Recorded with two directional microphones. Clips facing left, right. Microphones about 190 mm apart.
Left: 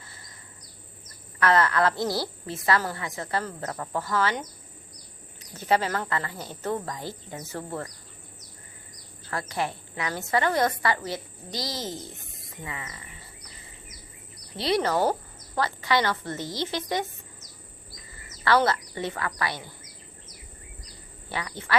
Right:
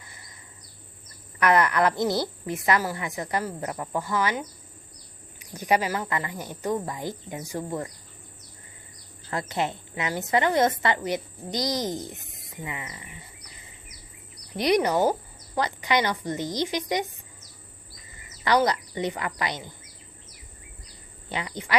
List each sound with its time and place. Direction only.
1.4 s a woman's voice: 15° right (ahead or behind)
5.4 s a woman's voice: 15° right (ahead or behind)
9.3 s a woman's voice: 20° right (ahead or behind)
14.5 s a woman's voice: 15° right (ahead or behind)
18.4 s a woman's voice: 15° right (ahead or behind)
21.2 s speech: 20° right (ahead or behind)